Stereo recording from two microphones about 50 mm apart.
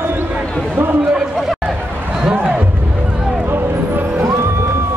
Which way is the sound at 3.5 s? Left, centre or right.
Right.